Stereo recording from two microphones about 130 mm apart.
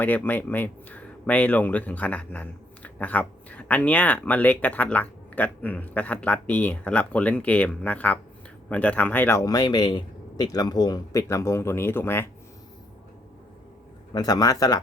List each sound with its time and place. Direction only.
0.0 s speech: 15° left (ahead or behind)
9.4 s a man's voice: 30° left (ahead or behind)
14.1 s a man's voice: 30° left (ahead or behind)